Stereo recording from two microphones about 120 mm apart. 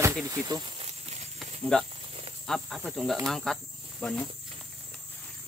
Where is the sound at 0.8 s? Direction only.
65° right (ahead or behind).